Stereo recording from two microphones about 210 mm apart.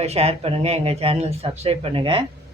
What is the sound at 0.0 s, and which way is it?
Speech, 30° right (ahead or behind).